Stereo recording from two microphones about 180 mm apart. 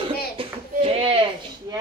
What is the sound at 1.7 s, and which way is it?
Speech, 20° right (ahead or behind).